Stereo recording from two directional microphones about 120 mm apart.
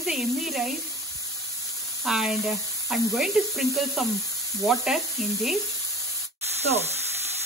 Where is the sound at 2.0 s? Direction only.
5° right (ahead or behind).